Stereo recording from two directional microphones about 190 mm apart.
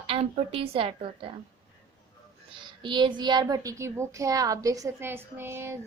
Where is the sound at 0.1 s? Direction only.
30° right (ahead or behind).